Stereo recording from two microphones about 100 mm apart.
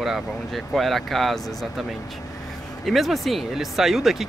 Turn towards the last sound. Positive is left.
turn(degrees=0)  # may be behind; listen again after turning